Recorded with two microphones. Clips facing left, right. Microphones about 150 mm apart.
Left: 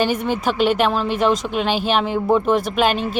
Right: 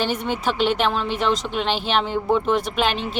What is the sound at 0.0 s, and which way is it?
Speech, 10° left (ahead or behind).